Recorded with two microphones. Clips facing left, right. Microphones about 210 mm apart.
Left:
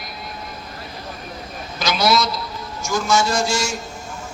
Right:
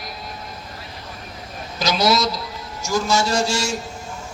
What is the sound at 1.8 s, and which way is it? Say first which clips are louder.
A man's voice: even; 40° right (ahead or behind).